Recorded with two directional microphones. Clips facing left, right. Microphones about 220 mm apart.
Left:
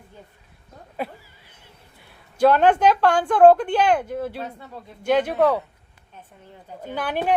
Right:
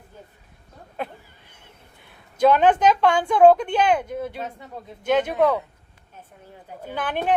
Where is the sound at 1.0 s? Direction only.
5° left (ahead or behind).